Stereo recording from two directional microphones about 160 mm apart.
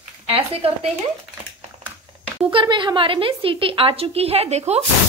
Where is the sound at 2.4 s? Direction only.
30° right (ahead or behind).